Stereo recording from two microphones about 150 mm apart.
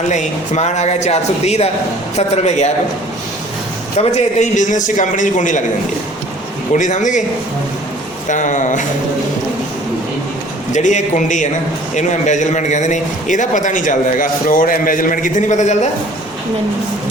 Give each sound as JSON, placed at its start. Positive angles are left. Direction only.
{"t": 0.1, "sound": "speech", "side_deg": 50}
{"t": 3.9, "sound": "a man's voice", "side_deg": 50}
{"t": 6.7, "sound": "a man's voice", "side_deg": 55}
{"t": 8.3, "sound": "a man's voice", "side_deg": 55}
{"t": 10.7, "sound": "a man's voice", "side_deg": 55}